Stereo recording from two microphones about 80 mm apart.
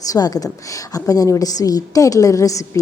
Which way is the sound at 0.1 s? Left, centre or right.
Left.